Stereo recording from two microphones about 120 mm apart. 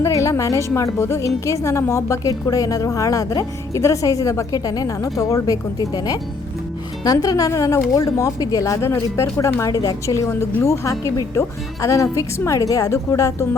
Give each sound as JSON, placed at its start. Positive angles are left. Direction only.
{"t": 0.0, "sound": "a woman's voice", "side_deg": 25}